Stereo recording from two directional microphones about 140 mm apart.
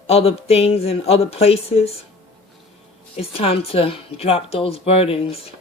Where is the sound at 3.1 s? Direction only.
45° left (ahead or behind).